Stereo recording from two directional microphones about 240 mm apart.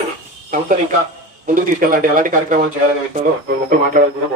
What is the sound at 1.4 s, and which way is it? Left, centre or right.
Speech, right.